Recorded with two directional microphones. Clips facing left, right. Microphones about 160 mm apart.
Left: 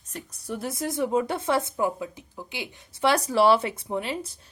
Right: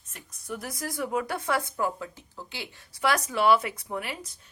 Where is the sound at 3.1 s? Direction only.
35° left (ahead or behind).